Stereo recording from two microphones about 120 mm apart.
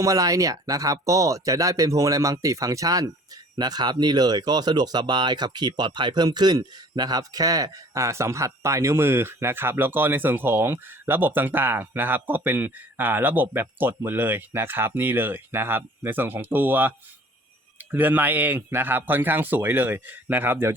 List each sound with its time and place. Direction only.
0.0 s speech: 30° right (ahead or behind)
17.9 s speech: 15° right (ahead or behind)